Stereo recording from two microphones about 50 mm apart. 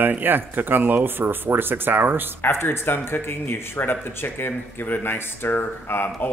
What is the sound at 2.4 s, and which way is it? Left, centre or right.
Speech, left.